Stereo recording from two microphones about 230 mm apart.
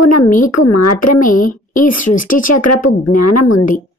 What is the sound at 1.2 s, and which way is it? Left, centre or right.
A woman's voice, left.